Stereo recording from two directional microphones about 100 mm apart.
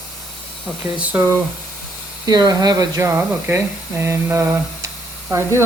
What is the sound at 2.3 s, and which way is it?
Speech, 45° right (ahead or behind).